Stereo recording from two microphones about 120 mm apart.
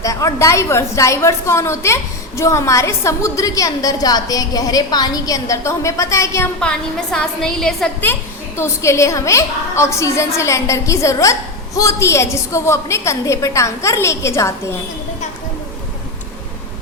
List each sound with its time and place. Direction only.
0.0 s a woman's voice: 25° left (ahead or behind)
6.6 s a woman's voice: 5° left (ahead or behind)
8.5 s a woman's voice: 20° left (ahead or behind)